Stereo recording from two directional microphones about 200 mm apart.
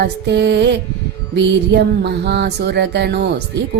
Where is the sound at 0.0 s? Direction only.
60° right (ahead or behind).